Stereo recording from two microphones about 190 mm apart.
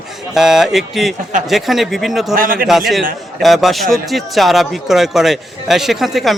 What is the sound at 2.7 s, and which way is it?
Speech, centre (ahead or behind).